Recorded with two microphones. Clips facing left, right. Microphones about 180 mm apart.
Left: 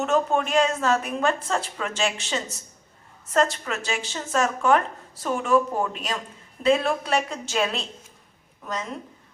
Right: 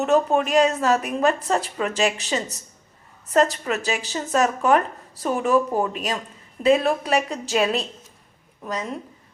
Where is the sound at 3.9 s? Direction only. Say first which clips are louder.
Even; 35° right (ahead or behind).